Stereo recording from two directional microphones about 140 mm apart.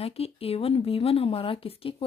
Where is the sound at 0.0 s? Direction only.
45° left (ahead or behind).